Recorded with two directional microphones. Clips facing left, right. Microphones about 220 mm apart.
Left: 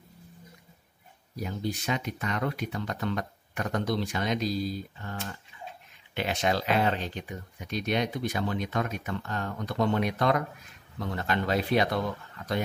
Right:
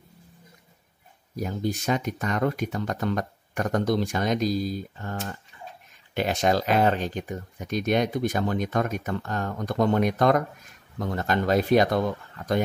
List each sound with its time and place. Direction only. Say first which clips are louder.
1.3 s speech: right 4 dB; 45° right (ahead or behind)